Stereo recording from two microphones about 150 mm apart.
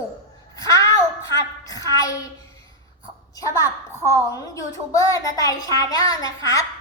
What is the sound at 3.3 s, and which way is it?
A woman's voice, 20° left (ahead or behind).